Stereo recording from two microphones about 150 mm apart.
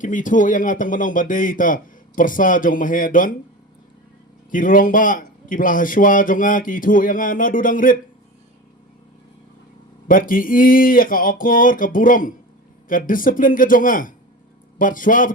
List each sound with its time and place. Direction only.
0.0 s a man's voice: 60° left (ahead or behind)
4.5 s a man's voice: 65° left (ahead or behind)
10.1 s a man's voice: 65° left (ahead or behind)